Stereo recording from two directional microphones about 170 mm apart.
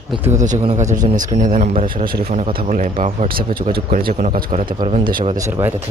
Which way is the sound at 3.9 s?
55° right (ahead or behind).